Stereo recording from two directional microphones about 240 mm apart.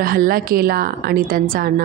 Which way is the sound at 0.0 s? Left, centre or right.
Right.